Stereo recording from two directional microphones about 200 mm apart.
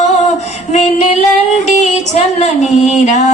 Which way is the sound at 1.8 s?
35° left (ahead or behind).